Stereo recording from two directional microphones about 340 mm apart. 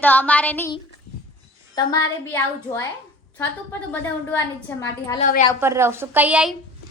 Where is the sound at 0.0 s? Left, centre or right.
Centre.